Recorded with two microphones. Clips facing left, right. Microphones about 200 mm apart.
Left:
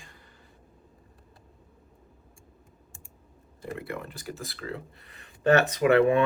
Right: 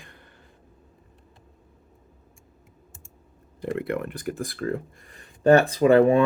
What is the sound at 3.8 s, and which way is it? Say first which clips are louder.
Speech: right 10 dB; 60° right (ahead or behind).